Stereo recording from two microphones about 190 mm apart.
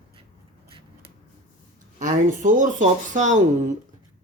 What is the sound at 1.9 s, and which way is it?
Speech, 40° right (ahead or behind).